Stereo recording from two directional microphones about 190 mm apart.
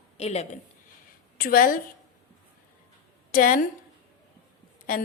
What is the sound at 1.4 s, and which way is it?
Speech, 50° left (ahead or behind).